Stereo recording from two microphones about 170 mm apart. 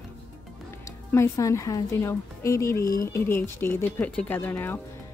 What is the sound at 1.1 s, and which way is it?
Speech, 15° left (ahead or behind).